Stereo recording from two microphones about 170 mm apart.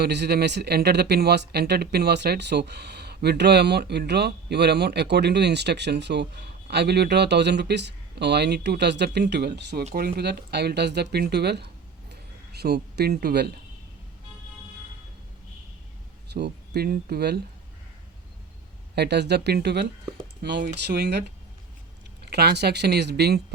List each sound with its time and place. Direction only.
0.0 s speech: 80° right
9.9 s speech: 65° right (ahead or behind)
16.3 s speech: 75° right (ahead or behind)
18.9 s speech: 75° right (ahead or behind)
22.3 s speech: 75° right (ahead or behind)